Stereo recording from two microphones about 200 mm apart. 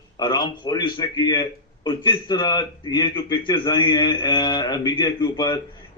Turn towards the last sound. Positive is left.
turn(degrees=20)  # may be behind; listen again after turning